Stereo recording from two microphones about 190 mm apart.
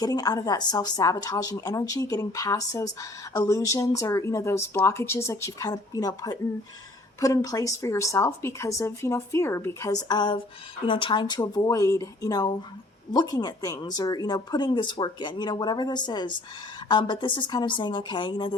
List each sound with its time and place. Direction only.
0.0 s a woman's voice: 20° left (ahead or behind)